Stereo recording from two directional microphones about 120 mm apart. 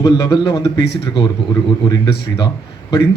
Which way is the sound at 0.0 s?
35° left (ahead or behind).